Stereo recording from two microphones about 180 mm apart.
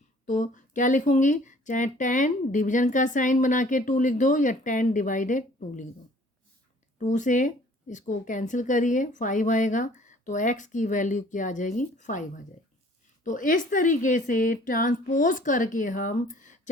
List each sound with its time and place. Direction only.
0.3 s speech: 45° left (ahead or behind)
7.0 s speech: 45° left (ahead or behind)
13.2 s speech: 45° left (ahead or behind)